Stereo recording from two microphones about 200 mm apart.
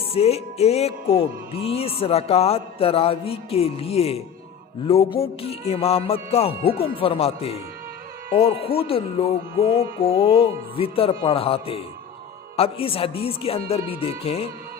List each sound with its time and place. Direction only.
0.1 s music: 30° left (ahead or behind)
1.6 s speech: 30° left (ahead or behind)
5.2 s speech: 30° left (ahead or behind)